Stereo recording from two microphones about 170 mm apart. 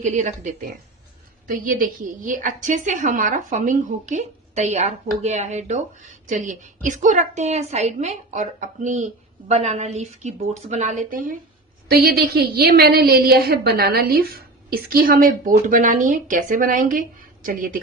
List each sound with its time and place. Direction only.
0.0 s a woman's voice: 45° right (ahead or behind)
11.9 s a woman's voice: 65° right (ahead or behind)